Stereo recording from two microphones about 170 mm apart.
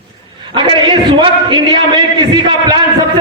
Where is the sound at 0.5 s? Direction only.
25° right (ahead or behind).